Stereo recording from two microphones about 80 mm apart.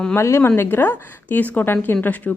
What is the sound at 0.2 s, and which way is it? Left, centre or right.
A woman's voice, left.